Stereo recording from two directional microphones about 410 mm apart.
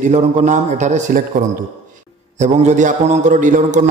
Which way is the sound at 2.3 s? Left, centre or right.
Centre.